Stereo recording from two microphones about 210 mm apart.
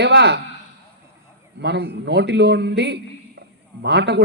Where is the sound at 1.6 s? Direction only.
55° right (ahead or behind).